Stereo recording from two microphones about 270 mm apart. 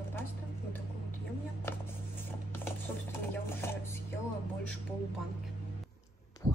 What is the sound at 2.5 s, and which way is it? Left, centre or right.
Music, centre.